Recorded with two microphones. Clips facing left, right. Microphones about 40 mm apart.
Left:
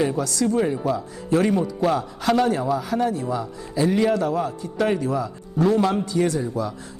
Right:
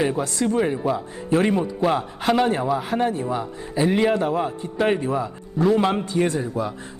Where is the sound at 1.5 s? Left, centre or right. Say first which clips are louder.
Even; centre.